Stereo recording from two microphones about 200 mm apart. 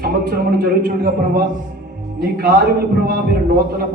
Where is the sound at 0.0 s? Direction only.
50° right (ahead or behind).